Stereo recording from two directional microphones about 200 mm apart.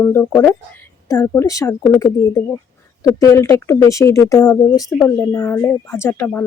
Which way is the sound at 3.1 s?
15° left (ahead or behind).